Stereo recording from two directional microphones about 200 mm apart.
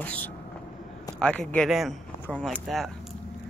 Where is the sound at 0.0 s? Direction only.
10° left (ahead or behind).